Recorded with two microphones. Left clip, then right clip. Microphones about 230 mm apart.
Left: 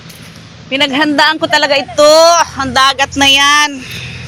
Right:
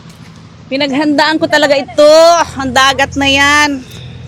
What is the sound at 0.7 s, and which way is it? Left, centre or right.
A woman's voice, right.